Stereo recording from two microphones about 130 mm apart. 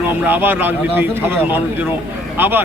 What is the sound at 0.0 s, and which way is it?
A man's voice, 15° right (ahead or behind).